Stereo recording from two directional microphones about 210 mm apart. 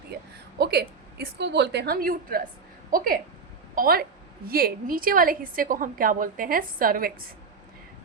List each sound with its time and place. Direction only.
0.6 s a woman's voice: 50° right (ahead or behind)